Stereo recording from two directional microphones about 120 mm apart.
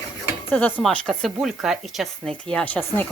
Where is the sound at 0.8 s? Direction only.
Centre (ahead or behind).